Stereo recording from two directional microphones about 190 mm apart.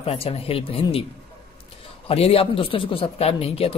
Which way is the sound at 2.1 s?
30° left (ahead or behind).